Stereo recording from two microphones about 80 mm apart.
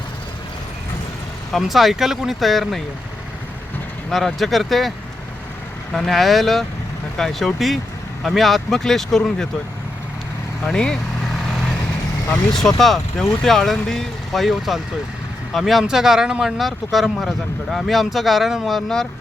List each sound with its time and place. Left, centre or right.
1.5 s speech: centre
4.1 s speech: centre
10.6 s speech: centre
12.3 s speech: centre